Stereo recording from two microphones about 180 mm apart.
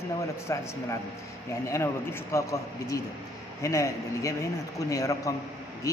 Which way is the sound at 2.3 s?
15° left (ahead or behind).